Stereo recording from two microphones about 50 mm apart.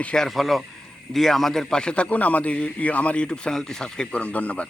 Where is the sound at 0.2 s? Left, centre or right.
Centre.